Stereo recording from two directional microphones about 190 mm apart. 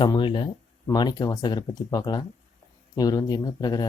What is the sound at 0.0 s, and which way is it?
Speech, 25° left (ahead or behind).